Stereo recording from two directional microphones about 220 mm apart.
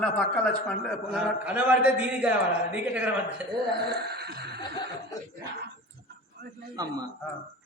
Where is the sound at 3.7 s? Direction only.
45° right (ahead or behind).